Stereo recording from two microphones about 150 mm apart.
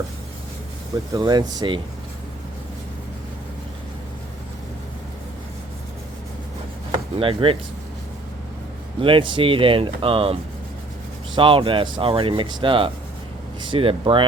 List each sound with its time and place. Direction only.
1.1 s speech: 30° right (ahead or behind)
7.2 s speech: 35° right (ahead or behind)
9.0 s speech: 35° right (ahead or behind)
11.3 s speech: 35° right (ahead or behind)